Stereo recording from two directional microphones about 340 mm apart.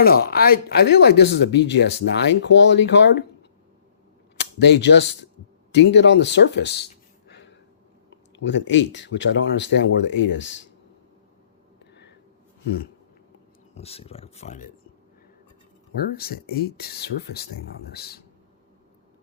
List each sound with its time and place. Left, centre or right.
0.0 s speech: left
4.4 s speech: left
7.3 s a sound: left
8.1 s speech: left
13.7 s speech: centre
16.1 s speech: left